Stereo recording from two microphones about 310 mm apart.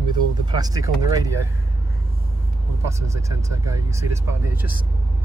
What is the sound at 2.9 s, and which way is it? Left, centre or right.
Speech, centre.